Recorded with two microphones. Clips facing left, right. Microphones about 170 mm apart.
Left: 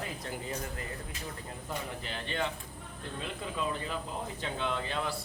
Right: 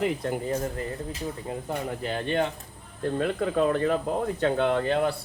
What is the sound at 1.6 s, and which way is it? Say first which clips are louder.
Speech: right 7 dB; 45° right (ahead or behind).